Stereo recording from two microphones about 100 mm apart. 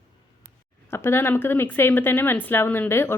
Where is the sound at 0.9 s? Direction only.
25° left (ahead or behind).